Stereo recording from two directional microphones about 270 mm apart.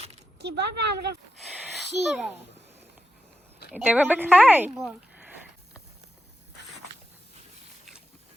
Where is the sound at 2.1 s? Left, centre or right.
Centre.